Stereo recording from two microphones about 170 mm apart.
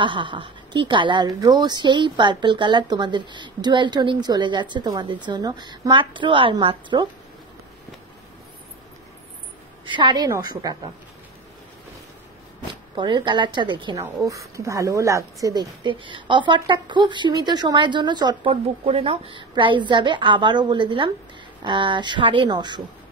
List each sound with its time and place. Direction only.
0.0 s speech: 30° right (ahead or behind)
9.8 s speech: 25° right (ahead or behind)
12.9 s speech: 25° right (ahead or behind)